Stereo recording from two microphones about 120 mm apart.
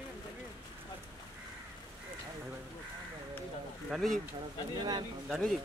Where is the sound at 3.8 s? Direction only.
Centre (ahead or behind).